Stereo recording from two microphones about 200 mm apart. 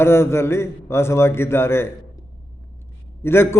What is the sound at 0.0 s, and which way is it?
A man's voice, 10° left (ahead or behind).